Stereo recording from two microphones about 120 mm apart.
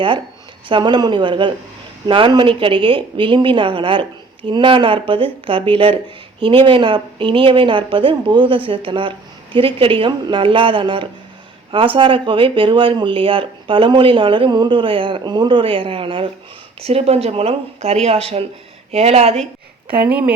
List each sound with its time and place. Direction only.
0.7 s speech: 40° right (ahead or behind); by 19.4 s 60° right (ahead or behind)